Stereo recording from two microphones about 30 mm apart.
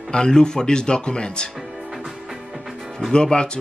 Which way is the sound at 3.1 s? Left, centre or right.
Left.